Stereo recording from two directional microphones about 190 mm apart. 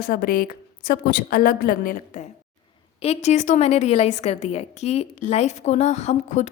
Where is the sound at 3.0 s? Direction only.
35° left (ahead or behind).